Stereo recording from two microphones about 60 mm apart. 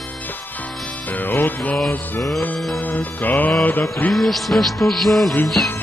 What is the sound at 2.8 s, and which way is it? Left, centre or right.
Music, left.